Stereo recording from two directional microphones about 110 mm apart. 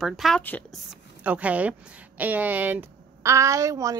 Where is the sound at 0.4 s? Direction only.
15° left (ahead or behind).